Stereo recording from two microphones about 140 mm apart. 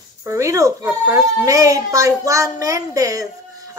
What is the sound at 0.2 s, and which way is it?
A woman's voice, 20° right (ahead or behind).